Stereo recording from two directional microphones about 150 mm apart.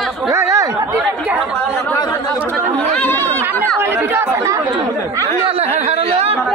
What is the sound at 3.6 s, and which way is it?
Speech, 15° right (ahead or behind).